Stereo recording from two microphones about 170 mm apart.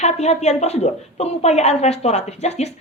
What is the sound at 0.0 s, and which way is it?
A woman's voice, 40° left (ahead or behind).